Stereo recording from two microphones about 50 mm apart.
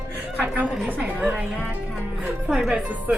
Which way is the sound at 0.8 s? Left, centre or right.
Right.